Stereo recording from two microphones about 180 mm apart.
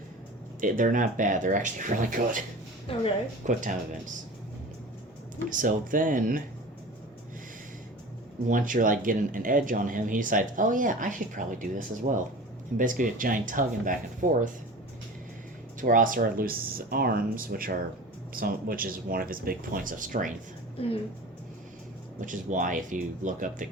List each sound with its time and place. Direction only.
0.6 s speech: 45° right (ahead or behind)
2.9 s a woman's voice: 30° left (ahead or behind)
3.4 s speech: 45° right (ahead or behind)
5.5 s speech: 45° right (ahead or behind)
8.4 s speech: 45° right (ahead or behind)
15.8 s speech: 50° right (ahead or behind)
22.2 s speech: 45° right (ahead or behind)